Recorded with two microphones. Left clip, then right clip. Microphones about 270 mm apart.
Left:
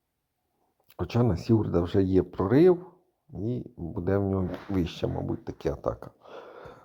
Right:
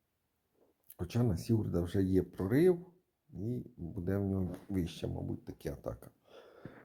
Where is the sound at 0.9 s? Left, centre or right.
Centre.